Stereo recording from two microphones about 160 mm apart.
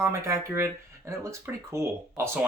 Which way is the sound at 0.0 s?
20° right (ahead or behind).